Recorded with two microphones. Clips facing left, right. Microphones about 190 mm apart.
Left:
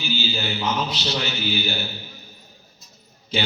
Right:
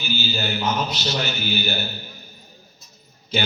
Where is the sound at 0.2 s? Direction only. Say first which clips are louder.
Right 1 dB; 45° right (ahead or behind).